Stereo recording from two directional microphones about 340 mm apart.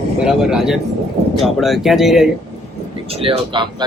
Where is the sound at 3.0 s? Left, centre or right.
Centre.